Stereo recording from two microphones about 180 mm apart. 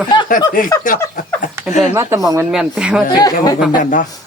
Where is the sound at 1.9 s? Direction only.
15° right (ahead or behind).